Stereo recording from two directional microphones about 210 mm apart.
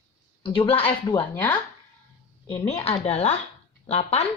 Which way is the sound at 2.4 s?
25° left (ahead or behind).